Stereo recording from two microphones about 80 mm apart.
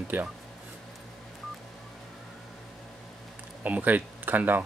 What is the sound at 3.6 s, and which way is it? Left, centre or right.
Speech, right.